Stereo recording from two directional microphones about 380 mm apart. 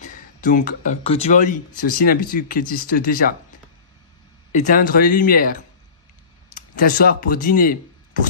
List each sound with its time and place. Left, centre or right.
0.0 s speech: left
4.5 s speech: centre